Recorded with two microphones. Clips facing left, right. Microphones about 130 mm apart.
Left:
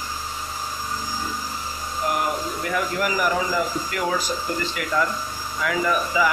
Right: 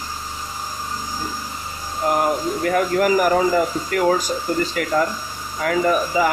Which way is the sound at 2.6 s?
50° right (ahead or behind).